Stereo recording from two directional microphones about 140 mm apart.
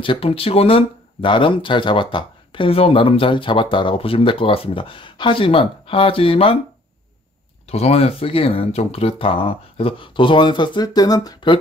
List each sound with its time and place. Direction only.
0.0 s speech: 40° left (ahead or behind)
7.6 s speech: 50° left (ahead or behind); by 11.5 s 30° left (ahead or behind)